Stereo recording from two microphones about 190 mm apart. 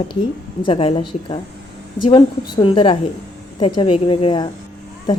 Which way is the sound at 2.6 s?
25° left (ahead or behind).